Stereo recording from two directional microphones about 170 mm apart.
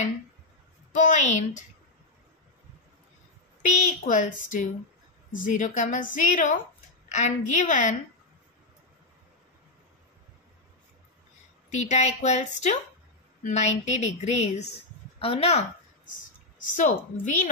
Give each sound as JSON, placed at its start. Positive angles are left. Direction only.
{"t": 0.9, "sound": "a woman's voice", "side_deg": 45}
{"t": 3.6, "sound": "a woman's voice", "side_deg": 45}
{"t": 11.7, "sound": "a woman's voice", "side_deg": 45}
{"t": 16.5, "sound": "a woman's voice", "side_deg": 50}